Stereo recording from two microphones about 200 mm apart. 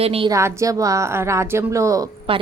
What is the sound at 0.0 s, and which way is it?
Speech, 30° right (ahead or behind).